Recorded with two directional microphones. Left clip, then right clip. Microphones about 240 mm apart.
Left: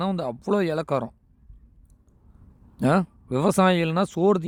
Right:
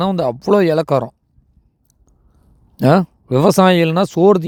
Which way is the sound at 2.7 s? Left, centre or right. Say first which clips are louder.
Right 9 dB; right.